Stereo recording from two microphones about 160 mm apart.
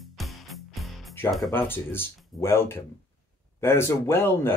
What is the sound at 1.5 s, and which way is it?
Speech, 15° left (ahead or behind).